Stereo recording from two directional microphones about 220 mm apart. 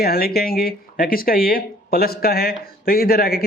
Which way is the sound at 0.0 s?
45° left (ahead or behind).